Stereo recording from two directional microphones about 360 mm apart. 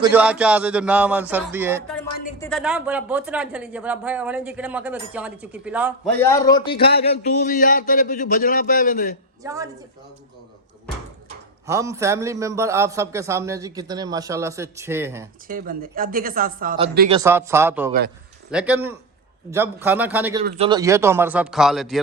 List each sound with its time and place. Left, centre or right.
0.0 s speech: centre
6.1 s a man's voice: centre
9.4 s a man's voice: centre
11.6 s a man's voice: centre
15.4 s speech: right
17.2 s a man's voice: centre
20.4 s speech: right
20.7 s speech: centre